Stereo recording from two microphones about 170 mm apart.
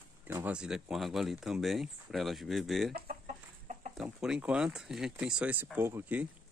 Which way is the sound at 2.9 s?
50° right (ahead or behind).